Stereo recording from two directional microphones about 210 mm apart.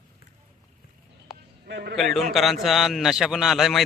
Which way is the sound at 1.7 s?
50° right (ahead or behind).